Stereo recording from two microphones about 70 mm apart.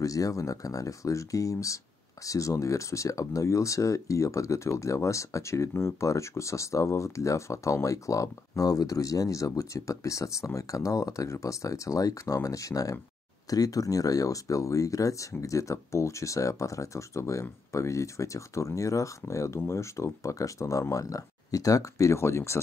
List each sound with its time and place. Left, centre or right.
0.0 s speech: left